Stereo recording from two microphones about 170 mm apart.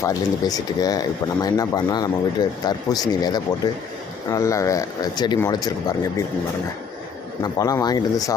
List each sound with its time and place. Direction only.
0.0 s speech: 20° left (ahead or behind)
7.4 s speech: 20° left (ahead or behind)